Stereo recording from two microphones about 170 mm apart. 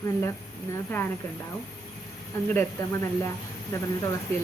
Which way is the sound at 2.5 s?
15° left (ahead or behind).